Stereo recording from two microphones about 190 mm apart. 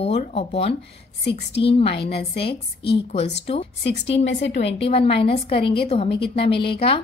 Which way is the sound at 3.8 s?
70° left (ahead or behind).